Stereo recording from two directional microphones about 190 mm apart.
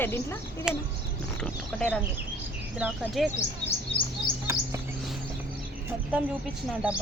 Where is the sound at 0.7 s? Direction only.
5° right (ahead or behind).